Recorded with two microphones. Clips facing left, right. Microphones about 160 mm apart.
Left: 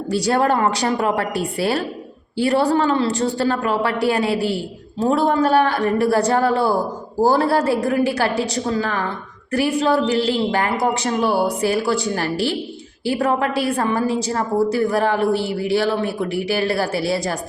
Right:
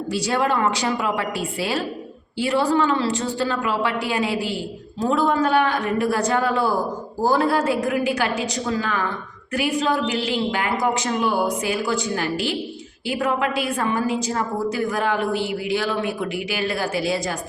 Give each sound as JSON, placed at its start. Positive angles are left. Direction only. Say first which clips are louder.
{"t": 0.3, "sound": "a woman's voice", "louder": "left 3 dB", "side_deg": 40}